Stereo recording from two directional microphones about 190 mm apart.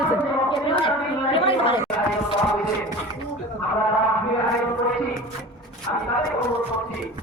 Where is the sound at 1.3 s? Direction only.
30° left (ahead or behind).